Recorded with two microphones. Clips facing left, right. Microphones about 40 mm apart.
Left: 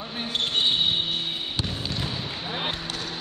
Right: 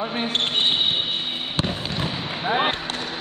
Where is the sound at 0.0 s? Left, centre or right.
Right.